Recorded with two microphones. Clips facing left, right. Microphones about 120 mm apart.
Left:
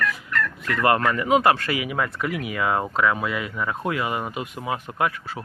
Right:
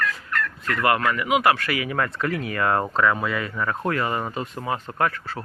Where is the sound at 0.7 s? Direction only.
25° left (ahead or behind).